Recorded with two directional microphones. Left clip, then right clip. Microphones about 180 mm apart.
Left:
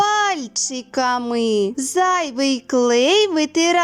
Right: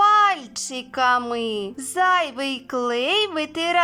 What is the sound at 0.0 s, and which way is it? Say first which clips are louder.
A woman's voice: right 2 dB; 25° left (ahead or behind).